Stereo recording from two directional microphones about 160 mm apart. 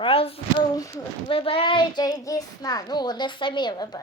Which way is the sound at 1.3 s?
35° left (ahead or behind).